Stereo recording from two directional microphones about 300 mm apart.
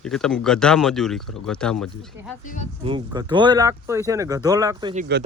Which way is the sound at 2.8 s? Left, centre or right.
Centre.